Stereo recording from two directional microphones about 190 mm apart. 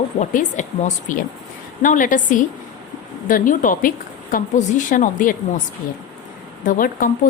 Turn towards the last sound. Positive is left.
turn(degrees=45)  # may be behind; listen again after turning